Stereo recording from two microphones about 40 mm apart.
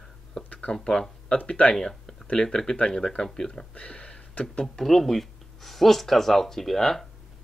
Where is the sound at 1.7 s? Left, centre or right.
Centre.